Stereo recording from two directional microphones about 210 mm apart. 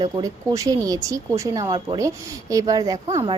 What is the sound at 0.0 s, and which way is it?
Speech, 15° right (ahead or behind).